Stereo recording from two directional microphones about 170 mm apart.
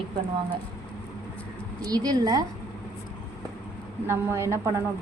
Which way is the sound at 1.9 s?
20° right (ahead or behind).